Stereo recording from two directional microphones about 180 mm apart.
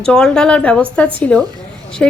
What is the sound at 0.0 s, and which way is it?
A woman's voice, 5° left (ahead or behind).